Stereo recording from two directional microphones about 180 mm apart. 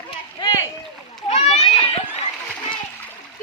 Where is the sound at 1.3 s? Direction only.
40° left (ahead or behind).